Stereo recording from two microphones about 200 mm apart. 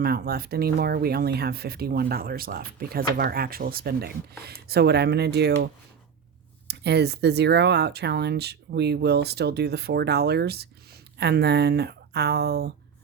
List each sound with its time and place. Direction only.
0.0 s speech: 50° right (ahead or behind)
6.7 s speech: 55° right (ahead or behind)